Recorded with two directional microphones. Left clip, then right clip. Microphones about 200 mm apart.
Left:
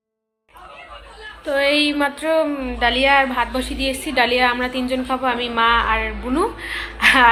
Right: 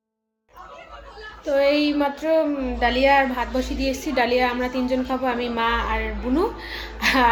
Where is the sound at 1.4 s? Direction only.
Centre (ahead or behind).